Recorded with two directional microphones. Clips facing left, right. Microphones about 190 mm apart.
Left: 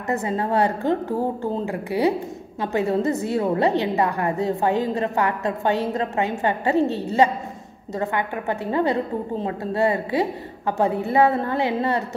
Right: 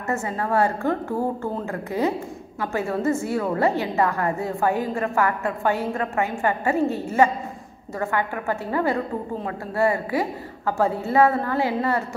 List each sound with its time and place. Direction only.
0.1 s a woman's voice: 20° left (ahead or behind)